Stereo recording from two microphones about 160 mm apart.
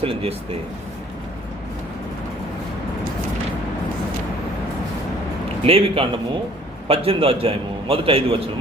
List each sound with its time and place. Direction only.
0.0 s a man's voice: 35° right (ahead or behind)
5.6 s a man's voice: 35° right (ahead or behind)